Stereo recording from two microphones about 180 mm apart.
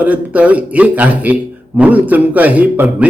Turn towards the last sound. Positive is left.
turn(degrees=-10)  # may be behind; listen again after turning